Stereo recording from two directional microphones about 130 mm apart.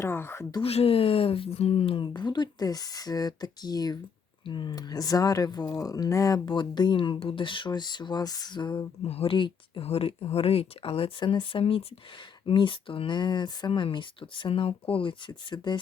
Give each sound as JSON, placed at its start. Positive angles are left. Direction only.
{"t": 0.0, "sound": "a sound", "side_deg": 15}
{"t": 0.6, "sound": "speech", "side_deg": 50}
{"t": 9.0, "sound": "speech", "side_deg": 45}